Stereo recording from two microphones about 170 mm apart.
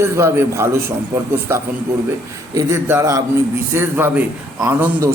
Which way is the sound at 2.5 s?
15° right (ahead or behind).